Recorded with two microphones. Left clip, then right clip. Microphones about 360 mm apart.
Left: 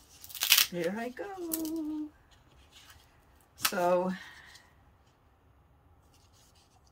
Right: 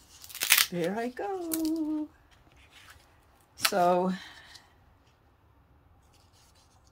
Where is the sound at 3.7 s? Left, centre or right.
Right.